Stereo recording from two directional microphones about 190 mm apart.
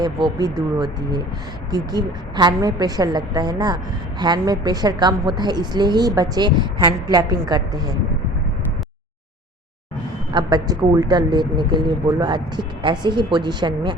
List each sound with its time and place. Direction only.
0.0 s a woman's voice: 20° right (ahead or behind)
10.3 s a woman's voice: 20° right (ahead or behind)